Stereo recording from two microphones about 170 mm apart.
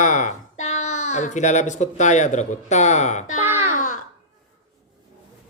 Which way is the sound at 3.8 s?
45° left (ahead or behind).